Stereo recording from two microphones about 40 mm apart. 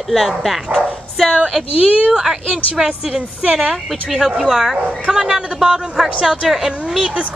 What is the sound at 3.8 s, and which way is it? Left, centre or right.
A woman's voice, centre.